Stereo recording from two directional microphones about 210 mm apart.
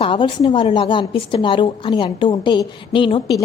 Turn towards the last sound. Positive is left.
turn(degrees=25)  # may be behind; listen again after turning